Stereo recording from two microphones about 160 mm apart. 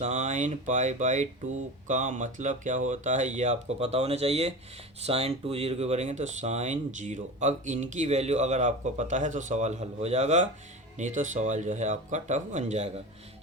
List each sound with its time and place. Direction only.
0.0 s speech: 45° right (ahead or behind)